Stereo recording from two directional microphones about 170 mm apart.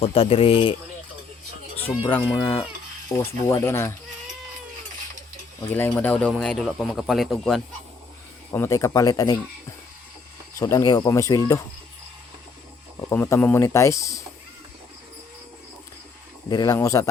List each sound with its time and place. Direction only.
0.0 s a man's voice: 35° left (ahead or behind)
2.0 s speech: 10° left (ahead or behind)
2.3 s speech: 25° left (ahead or behind)
5.7 s speech: 10° left (ahead or behind)
8.5 s speech: 15° left (ahead or behind)
10.6 s speech: 20° left (ahead or behind)
13.1 s speech: 15° left (ahead or behind)
16.5 s speech: 20° left (ahead or behind)